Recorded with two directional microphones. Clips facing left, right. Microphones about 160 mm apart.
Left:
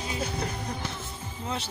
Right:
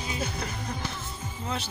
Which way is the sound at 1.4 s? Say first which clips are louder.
Even; 25° left (ahead or behind).